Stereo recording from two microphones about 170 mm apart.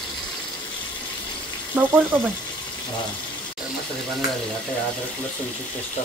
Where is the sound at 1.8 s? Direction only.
10° right (ahead or behind).